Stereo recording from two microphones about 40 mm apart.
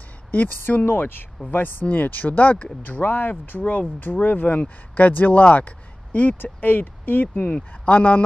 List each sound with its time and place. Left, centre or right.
0.3 s speech: left
1.5 s speech: left
2.8 s speech: left
4.5 s speech: left
7.5 s speech: left